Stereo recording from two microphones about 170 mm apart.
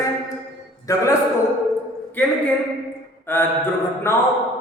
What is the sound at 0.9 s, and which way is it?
Speech, 20° left (ahead or behind).